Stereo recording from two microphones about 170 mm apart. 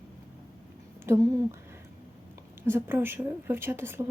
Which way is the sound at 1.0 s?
15° right (ahead or behind).